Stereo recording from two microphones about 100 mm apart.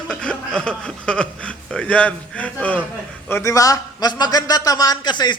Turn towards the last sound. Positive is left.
turn(degrees=45)  # may be behind; listen again after turning